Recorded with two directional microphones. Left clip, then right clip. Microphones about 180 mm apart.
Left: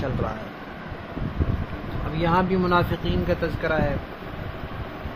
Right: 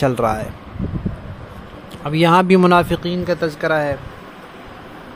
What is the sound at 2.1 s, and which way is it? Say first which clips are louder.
Speech: right 10 dB; 60° right (ahead or behind).